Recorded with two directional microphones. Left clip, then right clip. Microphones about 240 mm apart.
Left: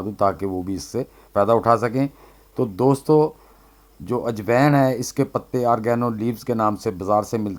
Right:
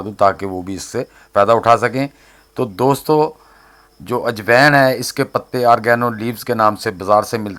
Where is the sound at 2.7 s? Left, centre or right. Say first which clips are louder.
Right 3 dB; centre.